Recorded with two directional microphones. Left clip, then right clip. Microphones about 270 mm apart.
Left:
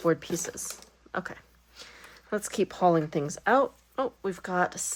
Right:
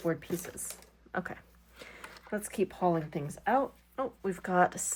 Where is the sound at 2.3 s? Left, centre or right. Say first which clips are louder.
Left 4 dB; centre.